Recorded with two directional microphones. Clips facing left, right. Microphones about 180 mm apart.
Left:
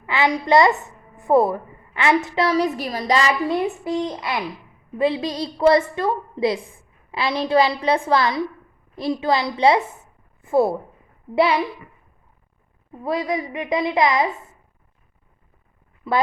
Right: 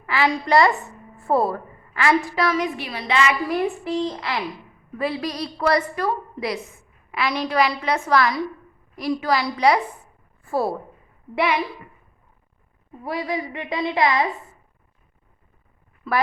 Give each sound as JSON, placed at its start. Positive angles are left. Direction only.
{"t": 0.0, "sound": "a woman's voice", "side_deg": 20}
{"t": 4.9, "sound": "a woman's voice", "side_deg": 25}
{"t": 13.1, "sound": "a woman's voice", "side_deg": 20}
{"t": 16.1, "sound": "a woman's voice", "side_deg": 20}